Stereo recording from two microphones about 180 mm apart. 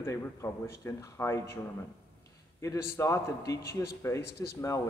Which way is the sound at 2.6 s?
15° left (ahead or behind).